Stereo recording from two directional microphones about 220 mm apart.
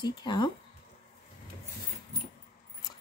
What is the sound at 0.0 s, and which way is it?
Speech, 20° left (ahead or behind).